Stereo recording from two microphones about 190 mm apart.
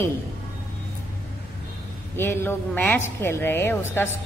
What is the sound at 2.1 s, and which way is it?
A woman's voice, 10° left (ahead or behind).